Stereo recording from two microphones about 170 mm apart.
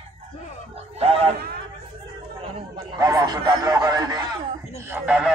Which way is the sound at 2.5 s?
30° right (ahead or behind).